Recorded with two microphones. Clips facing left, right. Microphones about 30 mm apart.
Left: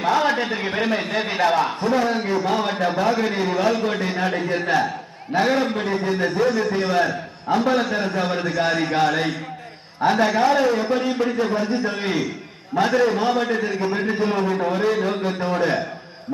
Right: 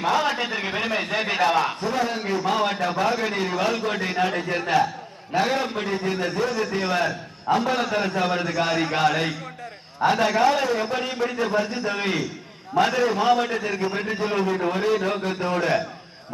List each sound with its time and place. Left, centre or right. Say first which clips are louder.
0.0 s a sound: left 3 dB; centre
0.9 s a man's voice: left 1 dB; centre
2.2 s a man's voice: left 1 dB; centre
2.7 s a man's voice: left 3 dB; centre
3.2 s a man's voice: left 3 dB; centre
4.3 s a man's voice: left 2 dB; centre